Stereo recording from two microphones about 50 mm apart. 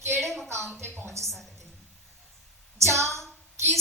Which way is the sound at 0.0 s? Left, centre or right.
Right.